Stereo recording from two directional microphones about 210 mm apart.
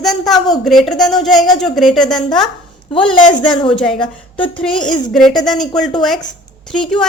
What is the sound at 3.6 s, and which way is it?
Speech, 25° left (ahead or behind).